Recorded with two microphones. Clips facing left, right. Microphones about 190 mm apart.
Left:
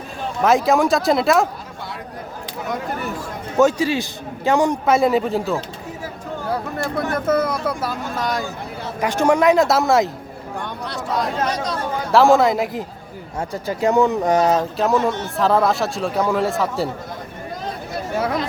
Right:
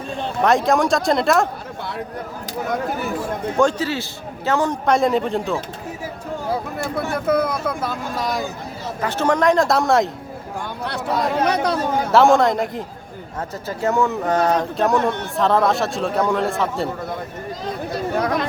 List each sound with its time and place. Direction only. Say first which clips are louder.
0.4 s speech: left 1 dB; centre (ahead or behind)
3.6 s speech: left 3 dB; 10° left (ahead or behind)
9.0 s speech: left 3 dB; 15° left (ahead or behind)
11.4 s speech: right 4 dB; 60° right (ahead or behind)
12.1 s speech: left 1 dB; centre (ahead or behind)
13.5 s speech: left 3 dB; 15° left (ahead or behind)